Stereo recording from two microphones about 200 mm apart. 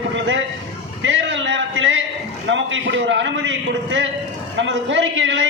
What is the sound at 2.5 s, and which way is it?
A man's voice, 65° right (ahead or behind).